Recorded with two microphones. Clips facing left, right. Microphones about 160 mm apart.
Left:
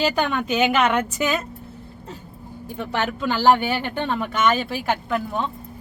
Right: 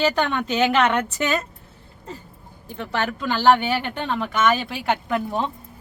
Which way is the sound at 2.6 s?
15° left (ahead or behind).